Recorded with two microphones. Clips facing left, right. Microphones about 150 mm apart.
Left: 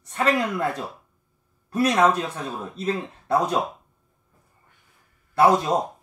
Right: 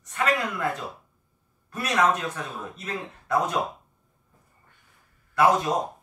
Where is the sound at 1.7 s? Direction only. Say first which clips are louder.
Left 4 dB; 30° left (ahead or behind).